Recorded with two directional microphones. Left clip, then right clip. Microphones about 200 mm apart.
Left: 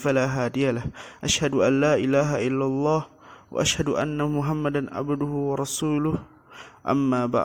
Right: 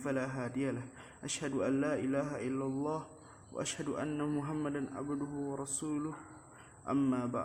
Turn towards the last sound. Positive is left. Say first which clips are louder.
# left 11 dB
turn(degrees=45)  # may be behind; listen again after turning